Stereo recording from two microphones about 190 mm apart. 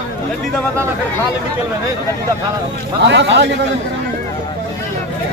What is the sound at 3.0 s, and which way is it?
Speech, 65° right (ahead or behind).